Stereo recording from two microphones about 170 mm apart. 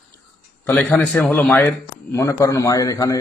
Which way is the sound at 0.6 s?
5° left (ahead or behind).